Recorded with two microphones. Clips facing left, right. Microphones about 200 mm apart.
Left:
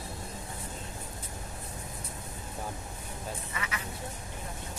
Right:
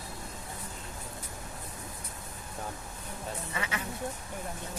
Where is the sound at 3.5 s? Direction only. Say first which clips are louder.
Right 4 dB; 30° right (ahead or behind).